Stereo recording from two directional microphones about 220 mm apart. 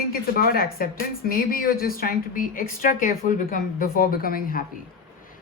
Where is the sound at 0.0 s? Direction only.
40° left (ahead or behind).